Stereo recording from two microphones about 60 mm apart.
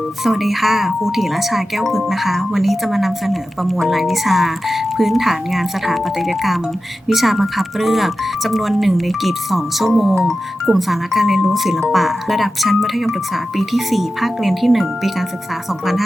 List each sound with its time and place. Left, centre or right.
0.3 s speech: centre